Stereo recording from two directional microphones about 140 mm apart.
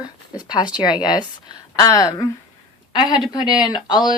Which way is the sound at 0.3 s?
30° left (ahead or behind).